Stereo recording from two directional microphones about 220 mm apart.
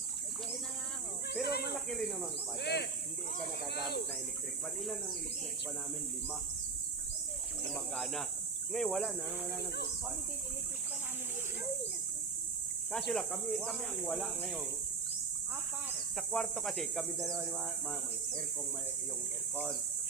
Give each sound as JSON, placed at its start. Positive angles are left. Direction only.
{"t": 1.3, "sound": "snake", "side_deg": 45}
{"t": 1.9, "sound": "speech", "side_deg": 0}
{"t": 2.6, "sound": "speech", "side_deg": 50}
{"t": 4.8, "sound": "speech", "side_deg": 0}
{"t": 7.7, "sound": "speech", "side_deg": 0}
{"t": 12.9, "sound": "speech", "side_deg": 0}
{"t": 16.1, "sound": "speech", "side_deg": 0}